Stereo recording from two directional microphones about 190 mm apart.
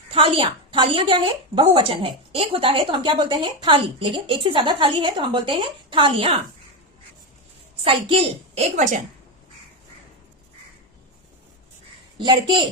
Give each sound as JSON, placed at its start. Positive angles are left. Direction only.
{"t": 0.1, "sound": "a woman's voice", "side_deg": -30}
{"t": 7.9, "sound": "a woman's voice", "side_deg": -30}
{"t": 12.1, "sound": "a woman's voice", "side_deg": -25}